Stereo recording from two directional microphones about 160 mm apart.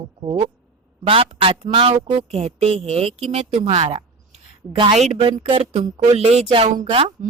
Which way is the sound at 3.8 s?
35° right (ahead or behind).